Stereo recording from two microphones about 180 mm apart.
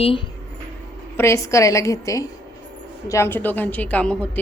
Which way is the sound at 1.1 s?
15° left (ahead or behind).